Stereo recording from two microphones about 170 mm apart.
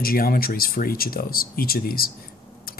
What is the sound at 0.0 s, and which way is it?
Speech, 60° left (ahead or behind).